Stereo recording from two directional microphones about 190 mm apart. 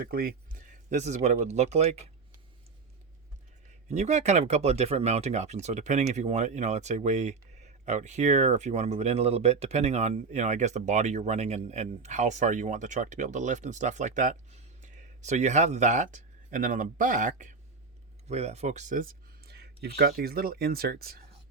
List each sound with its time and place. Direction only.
0.0 s speech: 50° right (ahead or behind); by 2.0 s 35° right (ahead or behind)
3.8 s speech: 35° right (ahead or behind); by 21.2 s 50° right (ahead or behind)